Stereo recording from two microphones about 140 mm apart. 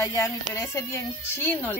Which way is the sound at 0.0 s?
20° left (ahead or behind).